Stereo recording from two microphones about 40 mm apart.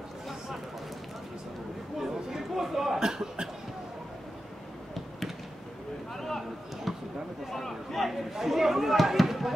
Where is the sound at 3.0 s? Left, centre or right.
Centre.